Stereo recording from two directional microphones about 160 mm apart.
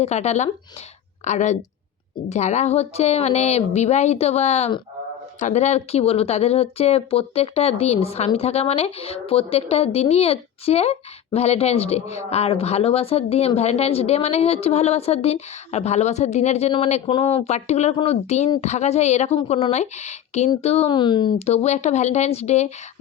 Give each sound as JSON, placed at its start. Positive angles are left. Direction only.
{"t": 0.0, "sound": "a woman's voice", "side_deg": 45}
{"t": 20.9, "sound": "speech", "side_deg": 30}
{"t": 21.4, "sound": "a woman's voice", "side_deg": 45}